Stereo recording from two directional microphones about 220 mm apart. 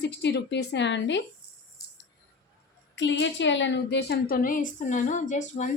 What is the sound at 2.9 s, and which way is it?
A woman's voice, 55° left (ahead or behind).